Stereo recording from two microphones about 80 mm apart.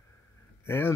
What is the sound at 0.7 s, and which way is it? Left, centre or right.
Speech, left.